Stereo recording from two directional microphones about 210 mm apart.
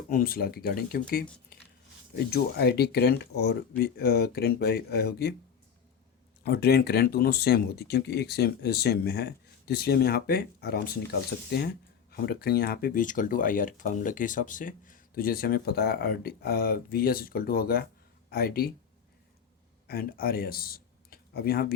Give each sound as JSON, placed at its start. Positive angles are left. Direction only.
{"t": 0.1, "sound": "speech", "side_deg": 45}
{"t": 2.1, "sound": "speech", "side_deg": 50}
{"t": 6.4, "sound": "speech", "side_deg": 50}
{"t": 19.9, "sound": "speech", "side_deg": 45}